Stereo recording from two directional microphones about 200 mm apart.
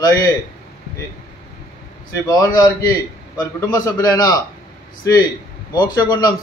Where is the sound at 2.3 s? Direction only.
15° left (ahead or behind).